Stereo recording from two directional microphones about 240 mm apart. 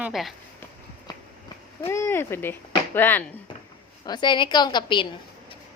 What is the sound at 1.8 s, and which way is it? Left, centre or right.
Speech, centre.